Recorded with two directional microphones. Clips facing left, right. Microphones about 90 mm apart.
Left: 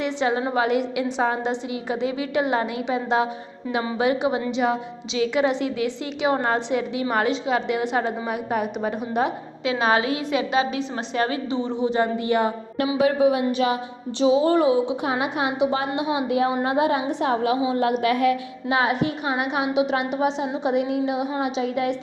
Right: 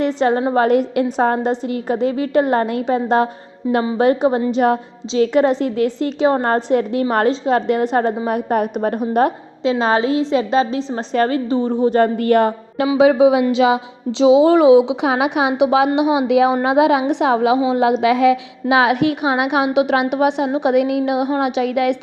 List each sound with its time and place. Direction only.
0.0 s a woman's voice: 40° right (ahead or behind)
9.6 s a woman's voice: 30° right (ahead or behind); by 12.5 s 55° right (ahead or behind)
12.8 s a woman's voice: 90° right
18.7 s a woman's voice: 80° right